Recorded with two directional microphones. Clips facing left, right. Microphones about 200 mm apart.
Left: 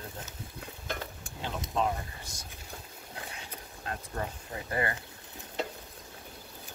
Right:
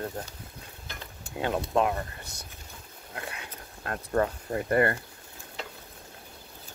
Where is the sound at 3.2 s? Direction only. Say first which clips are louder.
Right 5 dB; 65° right (ahead or behind).